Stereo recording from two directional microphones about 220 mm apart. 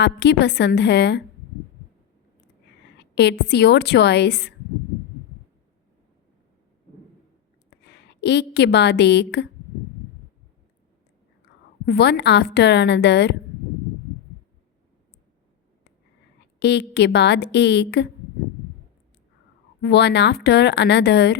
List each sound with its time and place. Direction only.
0.0 s a woman's voice: 50° left (ahead or behind)
3.0 s a woman's voice: 50° left (ahead or behind)
7.8 s a woman's voice: 50° left (ahead or behind)
11.5 s whispering: 50° left (ahead or behind)
11.9 s a woman's voice: 50° left (ahead or behind)
16.6 s a woman's voice: 50° left (ahead or behind)
19.8 s a woman's voice: 50° left (ahead or behind)